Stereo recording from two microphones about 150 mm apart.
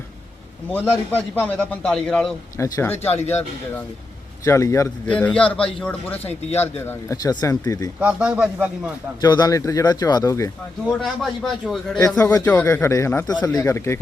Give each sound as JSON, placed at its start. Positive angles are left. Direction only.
{"t": 0.7, "sound": "a man's voice", "side_deg": 10}
{"t": 2.6, "sound": "a man's voice", "side_deg": 20}
{"t": 4.4, "sound": "speech", "side_deg": 20}
{"t": 5.0, "sound": "a man's voice", "side_deg": 5}
{"t": 7.9, "sound": "a man's voice", "side_deg": -5}
{"t": 9.2, "sound": "speech", "side_deg": 25}
{"t": 11.0, "sound": "a man's voice", "side_deg": 0}
{"t": 11.9, "sound": "speech", "side_deg": 20}